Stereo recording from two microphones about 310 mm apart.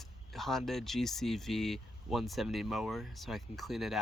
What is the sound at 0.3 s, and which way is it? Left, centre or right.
Speech, centre.